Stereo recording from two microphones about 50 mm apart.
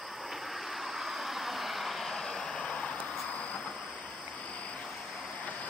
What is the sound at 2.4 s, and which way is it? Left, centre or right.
Vehicle, left.